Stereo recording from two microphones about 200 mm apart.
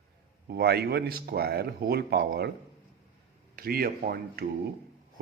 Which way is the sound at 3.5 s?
45° right (ahead or behind).